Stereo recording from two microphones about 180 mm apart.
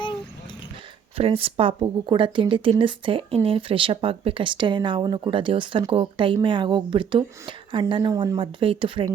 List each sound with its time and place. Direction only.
1.1 s speech: 30° right (ahead or behind)